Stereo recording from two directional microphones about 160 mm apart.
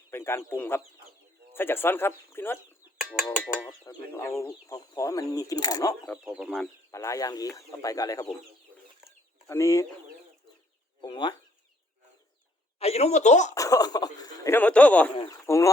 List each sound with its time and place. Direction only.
0.1 s speech: 15° left (ahead or behind)
3.0 s a sound: 5° right (ahead or behind)
3.2 s speech: 5° left (ahead or behind)
3.8 s speech: 15° left (ahead or behind)
6.2 s speech: 5° right (ahead or behind)
6.9 s speech: 20° left (ahead or behind)
9.5 s speech: 20° left (ahead or behind)
11.0 s speech: 25° left (ahead or behind)
12.8 s speech: 40° left (ahead or behind)
13.5 s speech: 20° left (ahead or behind)
15.1 s speech: 30° left (ahead or behind)
15.4 s speech: 20° left (ahead or behind)